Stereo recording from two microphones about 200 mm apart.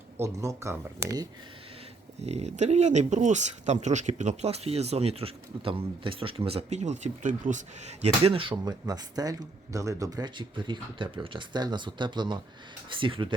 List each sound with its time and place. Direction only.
0.2 s speech: 15° right (ahead or behind)
2.2 s speech: 35° right (ahead or behind)